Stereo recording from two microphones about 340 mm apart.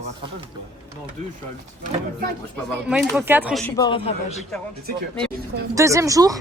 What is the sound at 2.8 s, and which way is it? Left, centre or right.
Speech, centre.